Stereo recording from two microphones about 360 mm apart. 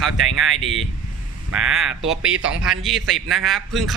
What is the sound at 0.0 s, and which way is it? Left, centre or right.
Speech, centre.